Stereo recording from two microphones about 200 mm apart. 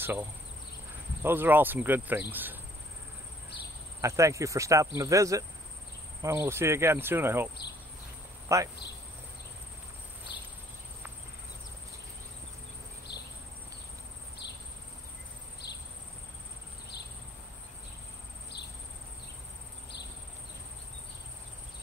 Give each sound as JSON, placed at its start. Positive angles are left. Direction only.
{"t": 0.0, "sound": "speech", "side_deg": -10}
{"t": 4.0, "sound": "speech", "side_deg": -15}
{"t": 8.5, "sound": "speech", "side_deg": -15}
{"t": 10.3, "sound": "cricket", "side_deg": 55}
{"t": 13.1, "sound": "insect", "side_deg": 60}
{"t": 14.4, "sound": "insect", "side_deg": 55}